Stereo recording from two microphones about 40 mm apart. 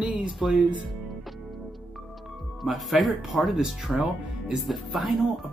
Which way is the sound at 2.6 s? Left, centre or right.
Centre.